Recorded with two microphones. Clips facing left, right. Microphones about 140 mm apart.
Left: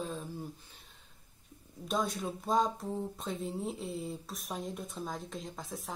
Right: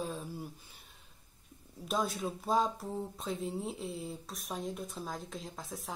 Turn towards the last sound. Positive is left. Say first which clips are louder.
# left 1 dB
turn(degrees=0)  # may be behind; listen again after turning